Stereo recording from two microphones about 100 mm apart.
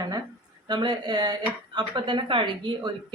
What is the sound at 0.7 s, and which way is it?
Speech, 50° right (ahead or behind).